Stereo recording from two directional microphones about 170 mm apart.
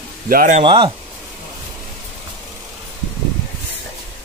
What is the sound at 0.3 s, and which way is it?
Speech, 55° right (ahead or behind).